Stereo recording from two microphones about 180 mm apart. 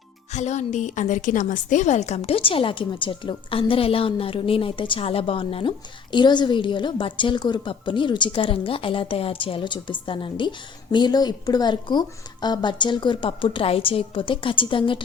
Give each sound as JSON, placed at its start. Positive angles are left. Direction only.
{"t": 0.3, "sound": "a woman's voice", "side_deg": 40}